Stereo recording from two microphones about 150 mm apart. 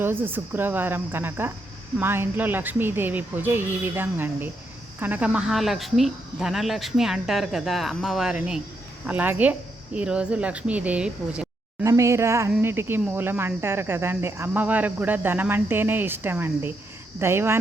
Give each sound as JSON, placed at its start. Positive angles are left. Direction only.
{"t": 0.0, "sound": "speech", "side_deg": -15}
{"t": 11.8, "sound": "speech", "side_deg": -20}